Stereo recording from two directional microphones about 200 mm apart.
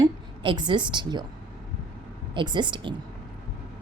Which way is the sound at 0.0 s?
20° right (ahead or behind).